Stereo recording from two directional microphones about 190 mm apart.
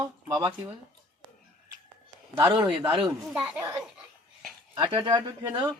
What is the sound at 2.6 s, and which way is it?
Speech, 25° right (ahead or behind).